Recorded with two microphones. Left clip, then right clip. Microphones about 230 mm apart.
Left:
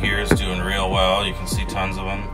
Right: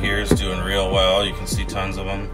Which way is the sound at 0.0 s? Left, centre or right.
Centre.